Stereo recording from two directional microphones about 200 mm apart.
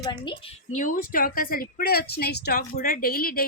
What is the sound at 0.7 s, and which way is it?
Speech, 40° left (ahead or behind).